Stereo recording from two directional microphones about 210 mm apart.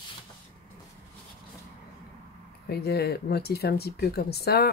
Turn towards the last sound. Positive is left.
turn(degrees=50)  # may be behind; listen again after turning